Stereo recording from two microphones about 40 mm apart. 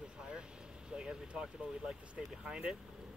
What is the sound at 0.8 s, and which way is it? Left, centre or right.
Speech, right.